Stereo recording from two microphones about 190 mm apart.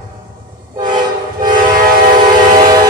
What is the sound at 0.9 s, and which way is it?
Train, 20° right (ahead or behind).